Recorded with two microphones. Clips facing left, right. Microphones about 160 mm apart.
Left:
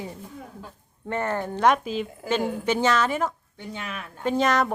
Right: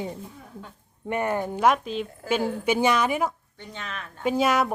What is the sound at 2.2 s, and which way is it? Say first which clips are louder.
Speech: even; 15° left (ahead or behind).